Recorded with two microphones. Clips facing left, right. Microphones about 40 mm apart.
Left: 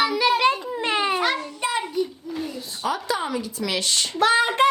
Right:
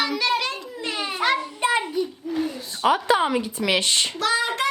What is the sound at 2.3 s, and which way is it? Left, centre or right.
Speech, right.